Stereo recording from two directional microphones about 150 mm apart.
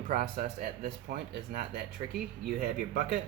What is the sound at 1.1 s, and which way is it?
Speech, 90° right.